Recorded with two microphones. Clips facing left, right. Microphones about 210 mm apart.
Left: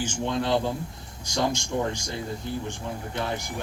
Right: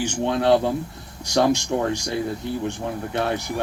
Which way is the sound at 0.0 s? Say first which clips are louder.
Right 6 dB; 65° right (ahead or behind).